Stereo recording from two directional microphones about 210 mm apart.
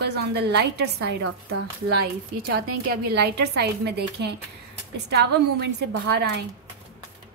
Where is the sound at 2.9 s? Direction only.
50° right (ahead or behind).